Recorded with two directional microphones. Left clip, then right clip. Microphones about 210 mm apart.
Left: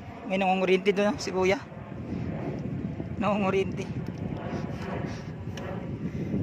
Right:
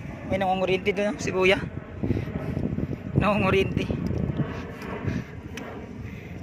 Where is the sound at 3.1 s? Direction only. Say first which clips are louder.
Right 4 dB; 5° right (ahead or behind).